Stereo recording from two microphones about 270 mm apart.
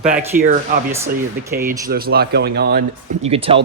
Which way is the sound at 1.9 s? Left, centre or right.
Right.